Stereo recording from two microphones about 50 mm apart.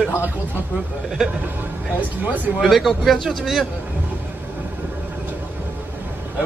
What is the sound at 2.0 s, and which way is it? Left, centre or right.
Speech, right.